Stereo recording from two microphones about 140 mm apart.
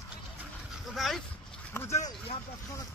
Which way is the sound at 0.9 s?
Centre (ahead or behind).